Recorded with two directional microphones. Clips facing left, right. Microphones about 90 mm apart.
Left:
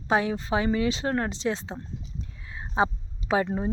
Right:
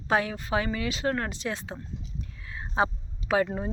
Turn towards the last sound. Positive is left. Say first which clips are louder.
# left 1 dB
turn(degrees=25)  # may be behind; listen again after turning